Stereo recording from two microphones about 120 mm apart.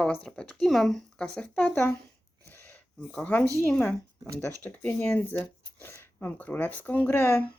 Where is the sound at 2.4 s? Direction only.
15° left (ahead or behind).